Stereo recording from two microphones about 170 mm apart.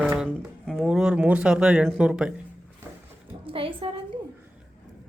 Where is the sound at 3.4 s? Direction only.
30° right (ahead or behind).